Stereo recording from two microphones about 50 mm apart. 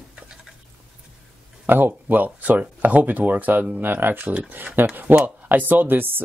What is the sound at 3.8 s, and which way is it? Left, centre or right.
Speech, right.